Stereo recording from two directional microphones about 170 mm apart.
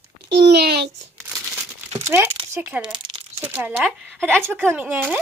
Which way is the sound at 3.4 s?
10° right (ahead or behind).